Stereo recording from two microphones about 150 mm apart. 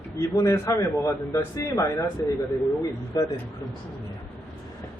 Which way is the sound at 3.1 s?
25° left (ahead or behind).